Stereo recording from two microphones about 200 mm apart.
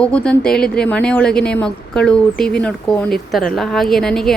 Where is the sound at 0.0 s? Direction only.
5° left (ahead or behind).